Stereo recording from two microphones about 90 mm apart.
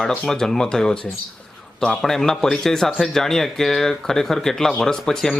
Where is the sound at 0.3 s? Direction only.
5° left (ahead or behind).